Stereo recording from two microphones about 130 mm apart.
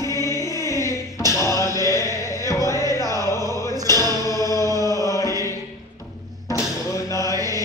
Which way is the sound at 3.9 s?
25° left (ahead or behind).